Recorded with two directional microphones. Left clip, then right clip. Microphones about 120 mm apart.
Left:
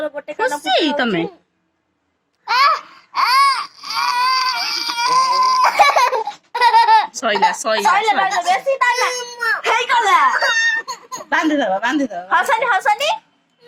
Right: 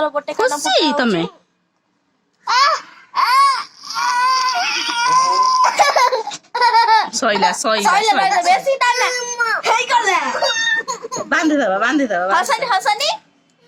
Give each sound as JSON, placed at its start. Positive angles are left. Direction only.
{"t": 0.3, "sound": "speech", "side_deg": -45}
{"t": 2.5, "sound": "baby cry", "side_deg": 0}
{"t": 7.1, "sound": "a woman's voice", "side_deg": -40}
{"t": 8.3, "sound": "a child's voice", "side_deg": -25}
{"t": 9.6, "sound": "a sound", "side_deg": 0}
{"t": 10.1, "sound": "a child's voice", "side_deg": -55}
{"t": 10.8, "sound": "baby laughter", "side_deg": -20}
{"t": 11.3, "sound": "speech", "side_deg": -45}
{"t": 12.3, "sound": "a woman's voice", "side_deg": -5}